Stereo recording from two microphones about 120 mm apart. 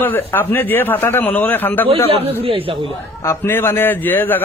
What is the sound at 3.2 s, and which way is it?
A man's voice, 20° left (ahead or behind).